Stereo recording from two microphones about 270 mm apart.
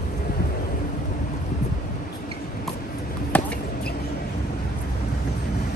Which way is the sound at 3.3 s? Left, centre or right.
Centre.